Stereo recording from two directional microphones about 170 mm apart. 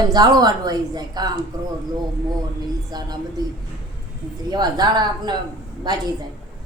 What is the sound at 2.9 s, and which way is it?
Mantra, 25° right (ahead or behind).